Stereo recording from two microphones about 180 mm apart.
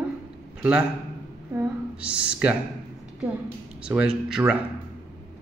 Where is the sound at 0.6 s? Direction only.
10° right (ahead or behind).